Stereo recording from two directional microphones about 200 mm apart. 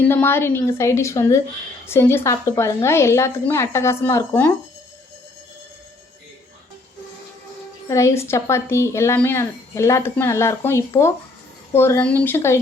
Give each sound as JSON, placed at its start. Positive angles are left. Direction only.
{"t": 0.1, "sound": "speech", "side_deg": 10}
{"t": 7.9, "sound": "speech", "side_deg": 15}